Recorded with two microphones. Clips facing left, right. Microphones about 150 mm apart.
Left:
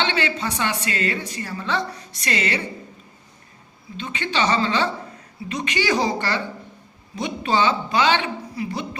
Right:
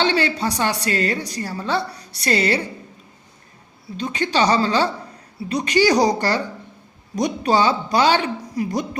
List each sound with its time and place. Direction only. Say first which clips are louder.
0.0 s a woman's voice: right 4 dB; 40° right (ahead or behind)
3.9 s a woman's voice: right 5 dB; 40° right (ahead or behind)